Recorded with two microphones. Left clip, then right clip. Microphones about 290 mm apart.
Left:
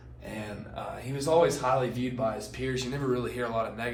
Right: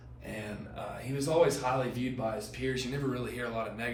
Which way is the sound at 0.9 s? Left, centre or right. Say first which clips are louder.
Left 3 dB; centre.